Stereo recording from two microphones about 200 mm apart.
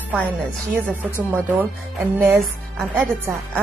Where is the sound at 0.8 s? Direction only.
5° left (ahead or behind).